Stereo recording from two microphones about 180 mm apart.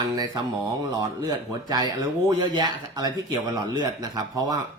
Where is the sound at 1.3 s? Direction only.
25° right (ahead or behind).